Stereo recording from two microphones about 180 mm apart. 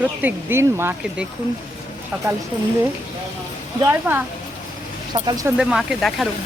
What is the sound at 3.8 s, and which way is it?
Speech, 15° right (ahead or behind).